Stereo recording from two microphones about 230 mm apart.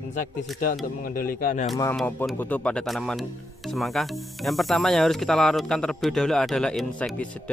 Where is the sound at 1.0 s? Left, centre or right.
Left.